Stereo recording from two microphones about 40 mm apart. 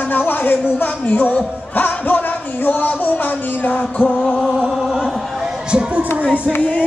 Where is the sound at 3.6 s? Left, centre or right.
Left.